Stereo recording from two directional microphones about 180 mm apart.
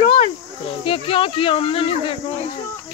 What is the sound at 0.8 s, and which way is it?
Speech, 30° left (ahead or behind).